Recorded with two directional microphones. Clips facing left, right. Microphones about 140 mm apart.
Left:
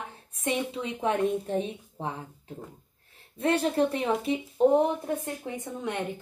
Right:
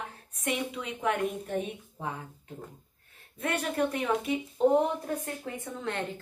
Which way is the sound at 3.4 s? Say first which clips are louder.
Left 5 dB; 30° left (ahead or behind).